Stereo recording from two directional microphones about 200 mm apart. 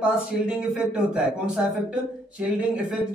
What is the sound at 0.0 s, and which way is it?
Speech, 5° right (ahead or behind).